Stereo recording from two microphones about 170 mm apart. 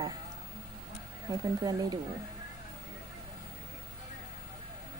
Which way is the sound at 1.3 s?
20° right (ahead or behind).